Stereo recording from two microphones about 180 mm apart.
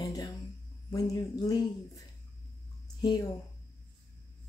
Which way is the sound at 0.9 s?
20° left (ahead or behind).